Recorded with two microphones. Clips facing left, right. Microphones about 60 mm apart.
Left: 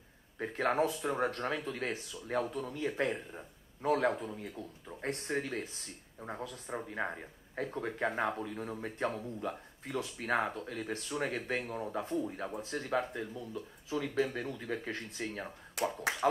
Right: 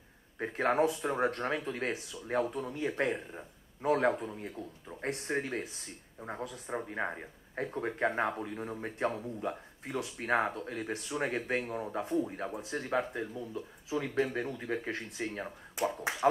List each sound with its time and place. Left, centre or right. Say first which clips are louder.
0.4 s speech: right 2 dB; right
0.7 s speech: right 2 dB; centre
8.5 s speech: right 1 dB; centre